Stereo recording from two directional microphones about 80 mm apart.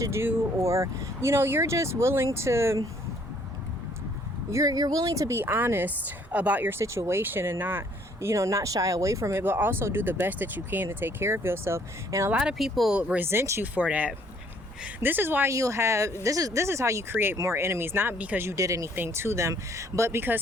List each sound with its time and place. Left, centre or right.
0.0 s speech: right
4.5 s speech: right
5.4 s speech: right
9.4 s speech: right
12.3 s speech: centre
13.2 s speech: right
13.6 s speech: centre
15.4 s speech: right
18.4 s speech: right
18.9 s speech: right